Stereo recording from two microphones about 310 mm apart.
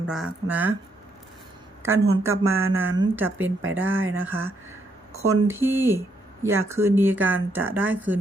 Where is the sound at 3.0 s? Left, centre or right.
Centre.